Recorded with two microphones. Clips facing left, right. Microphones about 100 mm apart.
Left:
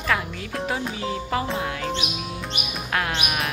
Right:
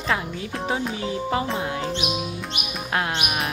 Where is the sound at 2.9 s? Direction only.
25° right (ahead or behind).